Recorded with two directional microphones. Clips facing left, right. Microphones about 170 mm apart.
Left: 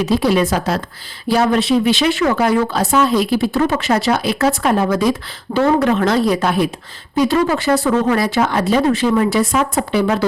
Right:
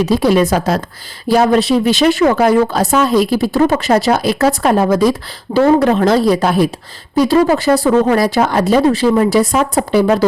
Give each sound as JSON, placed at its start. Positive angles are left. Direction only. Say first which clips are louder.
{"t": 0.0, "sound": "speech", "louder": "right 3 dB", "side_deg": -40}